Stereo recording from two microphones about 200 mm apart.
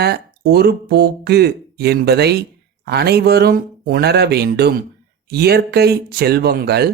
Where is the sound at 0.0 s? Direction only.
55° right (ahead or behind).